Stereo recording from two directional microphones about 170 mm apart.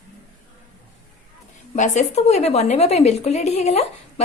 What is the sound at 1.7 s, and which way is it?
A woman's voice, 45° left (ahead or behind).